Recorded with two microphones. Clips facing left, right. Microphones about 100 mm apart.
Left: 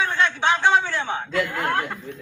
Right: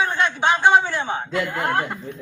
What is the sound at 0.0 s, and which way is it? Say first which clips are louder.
A man's voice: right 1 dB; 15° right (ahead or behind).